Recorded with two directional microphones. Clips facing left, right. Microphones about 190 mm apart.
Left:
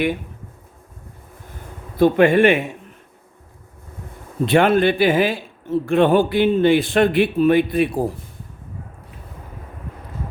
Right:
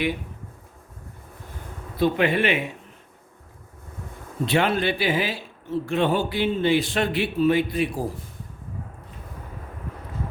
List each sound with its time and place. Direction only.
2.0 s a man's voice: 50° left (ahead or behind)
4.4 s a man's voice: 50° left (ahead or behind)